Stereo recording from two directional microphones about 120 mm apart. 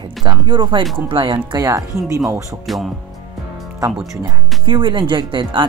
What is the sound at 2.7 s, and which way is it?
Speech, centre (ahead or behind).